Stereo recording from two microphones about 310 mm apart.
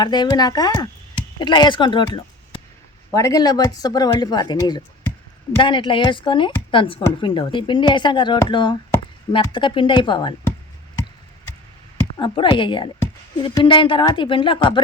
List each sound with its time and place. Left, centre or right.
0.0 s a woman's voice: centre
11.9 s a woman's voice: centre